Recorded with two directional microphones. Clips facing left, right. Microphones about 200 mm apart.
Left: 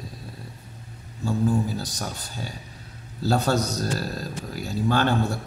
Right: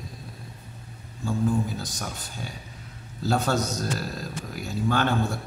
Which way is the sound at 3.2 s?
35° left (ahead or behind).